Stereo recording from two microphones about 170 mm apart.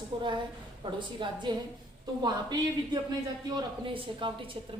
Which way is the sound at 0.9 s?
30° right (ahead or behind).